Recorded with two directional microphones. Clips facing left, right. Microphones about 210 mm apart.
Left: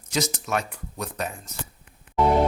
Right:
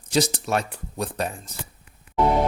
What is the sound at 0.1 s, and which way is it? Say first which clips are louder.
Speech: right 4 dB; 30° right (ahead or behind).